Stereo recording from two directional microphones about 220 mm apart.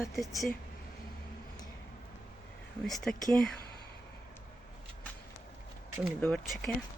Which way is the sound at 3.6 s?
45° left (ahead or behind).